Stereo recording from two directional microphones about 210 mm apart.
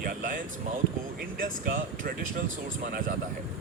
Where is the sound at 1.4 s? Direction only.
40° right (ahead or behind).